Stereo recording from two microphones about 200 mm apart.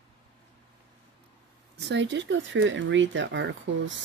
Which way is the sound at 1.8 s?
60° right (ahead or behind).